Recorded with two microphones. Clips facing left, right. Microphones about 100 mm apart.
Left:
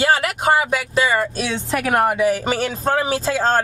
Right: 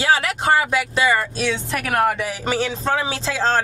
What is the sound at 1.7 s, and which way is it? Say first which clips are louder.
Speech: left 4 dB; 25° left (ahead or behind).